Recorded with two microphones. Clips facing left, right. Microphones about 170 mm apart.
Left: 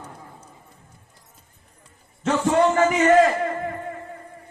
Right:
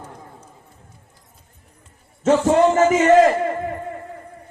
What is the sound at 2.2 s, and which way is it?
Speech, 40° right (ahead or behind).